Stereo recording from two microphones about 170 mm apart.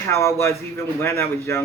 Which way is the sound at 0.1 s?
15° left (ahead or behind).